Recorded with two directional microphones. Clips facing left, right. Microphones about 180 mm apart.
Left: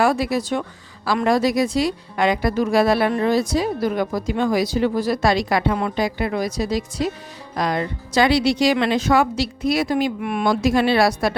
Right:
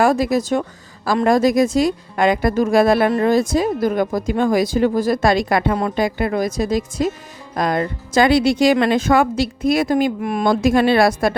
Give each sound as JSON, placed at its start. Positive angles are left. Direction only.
{"t": 0.0, "sound": "speech", "side_deg": -45}
{"t": 10.2, "sound": "speech", "side_deg": -40}